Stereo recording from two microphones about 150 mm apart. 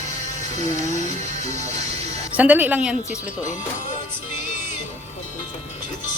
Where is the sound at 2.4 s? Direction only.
10° right (ahead or behind).